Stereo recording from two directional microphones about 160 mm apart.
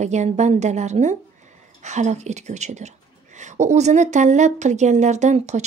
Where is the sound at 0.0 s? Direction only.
45° right (ahead or behind).